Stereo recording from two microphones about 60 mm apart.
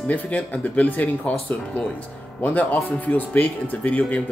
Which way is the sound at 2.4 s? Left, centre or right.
Left.